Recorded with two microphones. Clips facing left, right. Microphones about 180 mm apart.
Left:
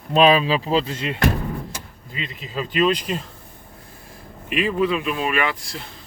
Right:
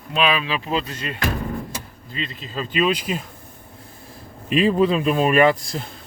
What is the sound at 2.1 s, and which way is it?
Speech, 5° left (ahead or behind).